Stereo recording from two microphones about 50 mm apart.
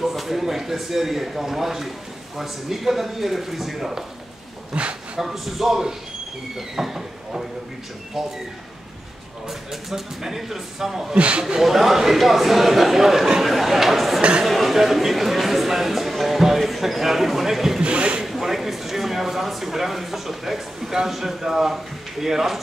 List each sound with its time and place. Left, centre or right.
0.1 s speech: centre
4.7 s a sound: right
5.2 s speech: centre
9.5 s speech: centre
11.1 s speech: right
11.4 s speech: centre
17.8 s zipper: right
18.2 s speech: centre